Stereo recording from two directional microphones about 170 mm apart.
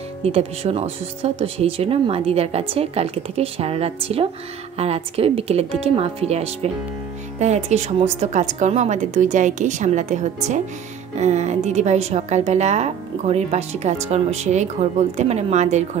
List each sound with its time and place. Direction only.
0.2 s a woman's voice: 35° right (ahead or behind)